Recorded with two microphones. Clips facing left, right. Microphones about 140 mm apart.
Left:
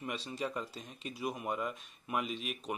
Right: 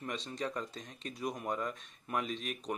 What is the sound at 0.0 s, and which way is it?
Speech, 5° left (ahead or behind).